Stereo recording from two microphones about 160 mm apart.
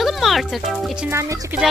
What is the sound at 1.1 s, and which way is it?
Speech, 20° right (ahead or behind).